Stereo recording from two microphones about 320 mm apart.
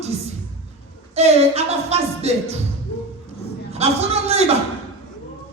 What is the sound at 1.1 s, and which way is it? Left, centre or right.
Speech, centre.